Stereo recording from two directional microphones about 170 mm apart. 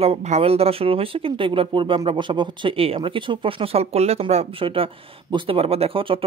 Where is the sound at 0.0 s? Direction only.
40° right (ahead or behind).